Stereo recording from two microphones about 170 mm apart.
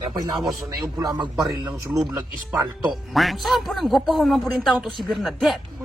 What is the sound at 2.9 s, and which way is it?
Speech, centre (ahead or behind).